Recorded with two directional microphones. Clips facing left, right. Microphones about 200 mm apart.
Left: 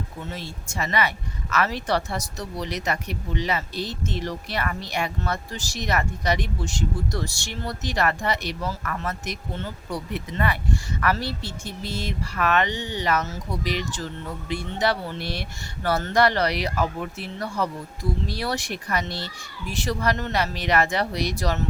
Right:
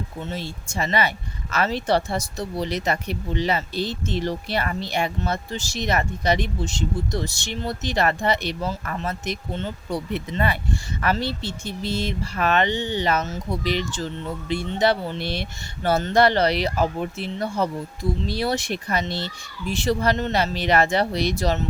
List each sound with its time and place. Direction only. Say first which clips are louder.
0.3 s speech: right 4 dB; 30° right (ahead or behind)